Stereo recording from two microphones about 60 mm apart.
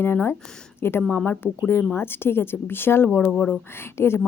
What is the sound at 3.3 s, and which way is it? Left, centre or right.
Speech, left.